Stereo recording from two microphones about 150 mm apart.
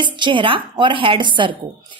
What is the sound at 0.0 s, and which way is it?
A woman's voice, 30° right (ahead or behind).